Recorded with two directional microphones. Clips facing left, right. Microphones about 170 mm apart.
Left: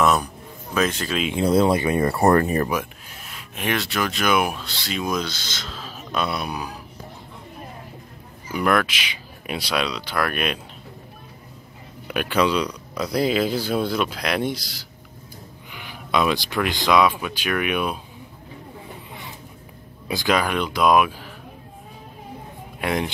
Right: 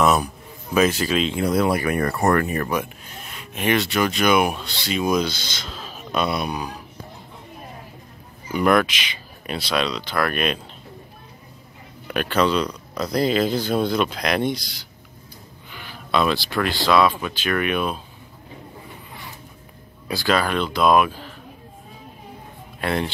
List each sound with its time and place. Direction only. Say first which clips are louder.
0.0 s a man's voice: right 1 dB; 5° right (ahead or behind)
1.3 s speech: left 7 dB; 25° left (ahead or behind)
2.7 s speech: right 1 dB; 5° left (ahead or behind)
8.5 s speech: right 3 dB; 5° left (ahead or behind)
12.1 s speech: right 1 dB; 10° left (ahead or behind)
15.7 s speech: even; 15° left (ahead or behind)
20.1 s speech: even; 15° left (ahead or behind)
22.8 s speech: even; 15° left (ahead or behind)